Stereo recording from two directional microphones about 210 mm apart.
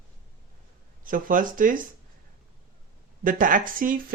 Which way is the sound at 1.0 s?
40° right (ahead or behind).